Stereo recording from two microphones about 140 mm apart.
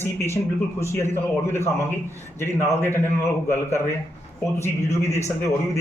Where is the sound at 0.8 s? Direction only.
15° left (ahead or behind).